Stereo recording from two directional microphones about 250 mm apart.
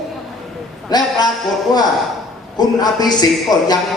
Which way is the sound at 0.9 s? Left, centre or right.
Centre.